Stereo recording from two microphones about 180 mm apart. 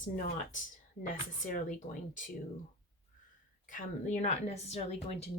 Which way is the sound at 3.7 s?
45° left (ahead or behind).